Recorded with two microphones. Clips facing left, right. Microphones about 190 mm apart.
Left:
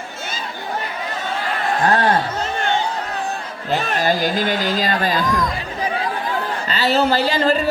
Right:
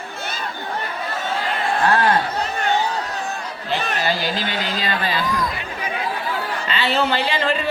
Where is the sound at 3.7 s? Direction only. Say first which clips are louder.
Left 4 dB; 40° left (ahead or behind).